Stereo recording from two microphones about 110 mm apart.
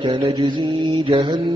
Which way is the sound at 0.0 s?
50° right (ahead or behind).